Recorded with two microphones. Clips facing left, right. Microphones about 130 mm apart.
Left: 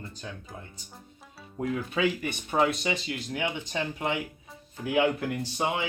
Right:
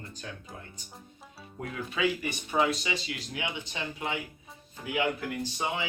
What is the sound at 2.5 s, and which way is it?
Speech, 50° left (ahead or behind).